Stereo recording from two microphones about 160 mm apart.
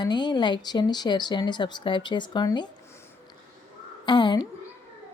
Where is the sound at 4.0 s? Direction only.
30° left (ahead or behind).